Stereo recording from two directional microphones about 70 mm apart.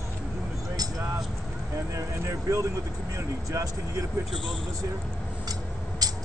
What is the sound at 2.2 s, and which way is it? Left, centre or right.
Speech, right.